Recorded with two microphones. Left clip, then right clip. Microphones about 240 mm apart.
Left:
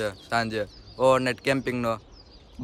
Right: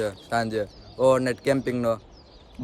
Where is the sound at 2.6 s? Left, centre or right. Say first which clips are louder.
Right 2 dB; centre.